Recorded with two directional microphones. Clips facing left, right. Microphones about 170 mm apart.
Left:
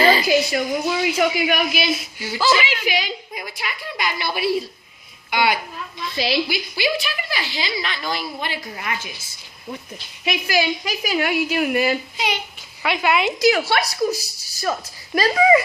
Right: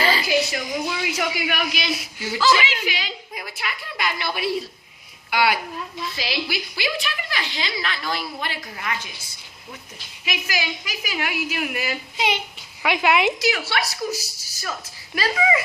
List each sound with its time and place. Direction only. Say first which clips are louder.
0.0 s a sound: left 6 dB; 15° left (ahead or behind)
0.5 s a man's voice: left 5 dB; 30° left (ahead or behind); by 3.4 s 15° left (ahead or behind)
3.5 s a woman's voice: left 1 dB; centre (ahead or behind)
6.1 s a woman's voice: left 8 dB; 35° left (ahead or behind)
6.5 s a woman's voice: left 4 dB; centre (ahead or behind)
10.2 s a woman's voice: left 7 dB; 35° left (ahead or behind)
12.1 s a child's voice: right 1 dB; 20° right (ahead or behind)
13.4 s a woman's voice: left 6 dB; 40° left (ahead or behind)
13.8 s a man's voice: left 5 dB; 15° left (ahead or behind)
14.6 s a woman's voice: left 8 dB; 40° left (ahead or behind)